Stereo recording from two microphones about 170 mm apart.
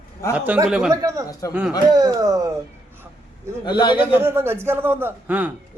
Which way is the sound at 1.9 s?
25° right (ahead or behind).